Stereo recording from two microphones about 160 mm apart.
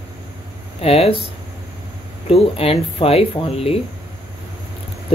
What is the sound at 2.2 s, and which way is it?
Speech, 35° left (ahead or behind).